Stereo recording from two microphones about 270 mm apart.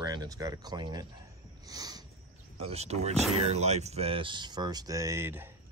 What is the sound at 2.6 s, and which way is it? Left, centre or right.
Speech, right.